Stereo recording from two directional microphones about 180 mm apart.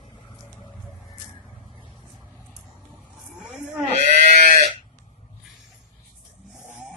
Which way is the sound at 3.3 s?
5° right (ahead or behind).